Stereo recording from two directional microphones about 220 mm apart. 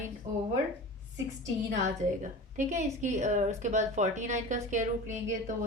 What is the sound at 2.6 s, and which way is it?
A woman's voice, 35° right (ahead or behind).